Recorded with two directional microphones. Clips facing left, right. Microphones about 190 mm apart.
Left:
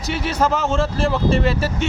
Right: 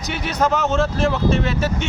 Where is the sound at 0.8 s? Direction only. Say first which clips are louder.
Right 1 dB; 35° left (ahead or behind).